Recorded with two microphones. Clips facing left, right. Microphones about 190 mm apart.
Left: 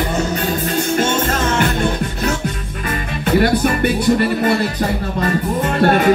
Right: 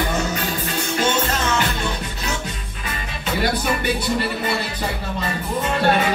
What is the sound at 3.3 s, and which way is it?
Music, 55° left (ahead or behind).